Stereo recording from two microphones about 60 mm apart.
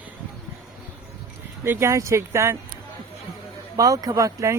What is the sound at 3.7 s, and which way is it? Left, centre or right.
Speech, right.